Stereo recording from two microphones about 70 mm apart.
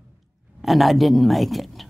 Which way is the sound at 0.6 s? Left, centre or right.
Centre.